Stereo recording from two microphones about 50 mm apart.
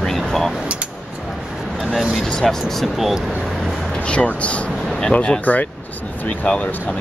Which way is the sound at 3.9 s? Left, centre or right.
Left.